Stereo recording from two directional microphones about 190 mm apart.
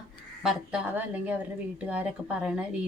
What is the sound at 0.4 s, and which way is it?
A woman's voice, 5° right (ahead or behind).